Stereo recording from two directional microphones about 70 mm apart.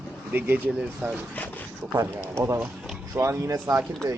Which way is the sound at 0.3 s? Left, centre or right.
Right.